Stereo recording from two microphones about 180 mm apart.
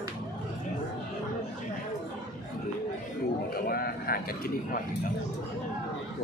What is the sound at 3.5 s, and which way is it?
A man's voice, 60° left (ahead or behind).